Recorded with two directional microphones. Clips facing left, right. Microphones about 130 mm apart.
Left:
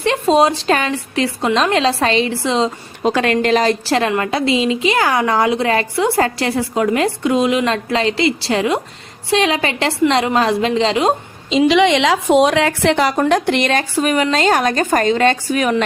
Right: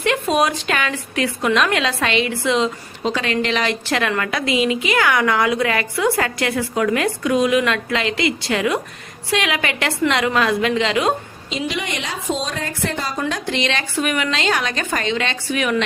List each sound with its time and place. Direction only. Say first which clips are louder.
0.0 s a woman's voice: left 5 dB; 30° left (ahead or behind)
3.0 s a woman's voice: left 5 dB; 45° left (ahead or behind); by 11.1 s 30° left (ahead or behind)
11.5 s a woman's voice: left 13 dB; 90° left; by 15.7 s 40° left (ahead or behind)